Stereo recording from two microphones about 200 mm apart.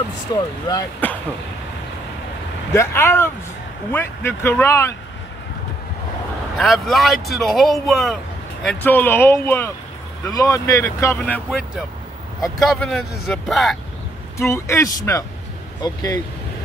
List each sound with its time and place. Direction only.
0.3 s speech: 20° left (ahead or behind)
2.7 s speech: 15° left (ahead or behind)
6.6 s speech: centre (ahead or behind)
14.4 s speech: 15° left (ahead or behind)